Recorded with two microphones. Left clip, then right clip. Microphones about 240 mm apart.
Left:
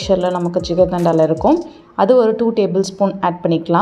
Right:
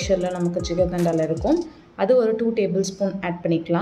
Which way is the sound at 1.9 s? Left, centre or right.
Left.